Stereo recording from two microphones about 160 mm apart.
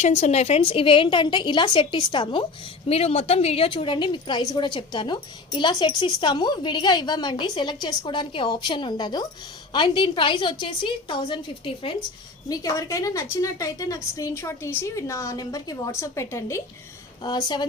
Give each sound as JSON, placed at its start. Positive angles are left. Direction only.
{"t": 0.0, "sound": "a woman's voice", "side_deg": 45}
{"t": 12.5, "sound": "a woman's voice", "side_deg": 20}
{"t": 17.2, "sound": "a woman's voice", "side_deg": 25}